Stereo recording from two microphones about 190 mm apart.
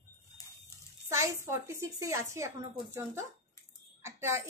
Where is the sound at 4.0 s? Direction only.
15° right (ahead or behind).